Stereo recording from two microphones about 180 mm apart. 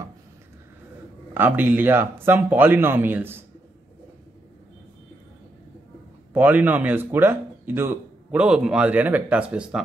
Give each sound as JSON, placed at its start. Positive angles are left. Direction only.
{"t": 1.3, "sound": "speech", "side_deg": -10}
{"t": 6.3, "sound": "speech", "side_deg": -10}